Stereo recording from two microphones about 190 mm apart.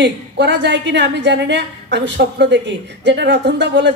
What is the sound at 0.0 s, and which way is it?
A woman's voice, 65° right (ahead or behind).